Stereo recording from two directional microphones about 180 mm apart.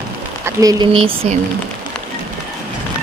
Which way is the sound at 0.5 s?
20° right (ahead or behind).